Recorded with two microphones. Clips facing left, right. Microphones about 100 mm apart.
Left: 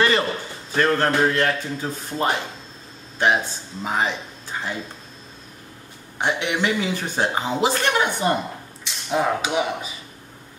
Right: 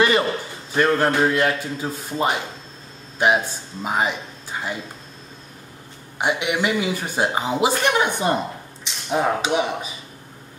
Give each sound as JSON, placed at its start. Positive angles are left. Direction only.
{"t": 0.7, "sound": "speech", "side_deg": -10}
{"t": 6.1, "sound": "speech", "side_deg": -10}